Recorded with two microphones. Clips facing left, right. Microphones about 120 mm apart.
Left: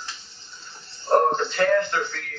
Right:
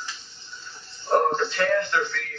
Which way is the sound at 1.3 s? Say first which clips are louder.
Left 2 dB; 35° left (ahead or behind).